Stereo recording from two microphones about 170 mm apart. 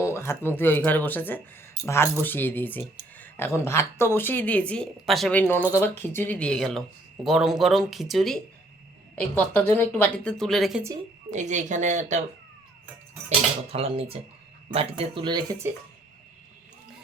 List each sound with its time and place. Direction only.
0.0 s speech: 15° left (ahead or behind); by 10.8 s centre (ahead or behind)
11.3 s speech: 45° right (ahead or behind)
13.7 s speech: 35° right (ahead or behind); by 15.7 s 20° right (ahead or behind)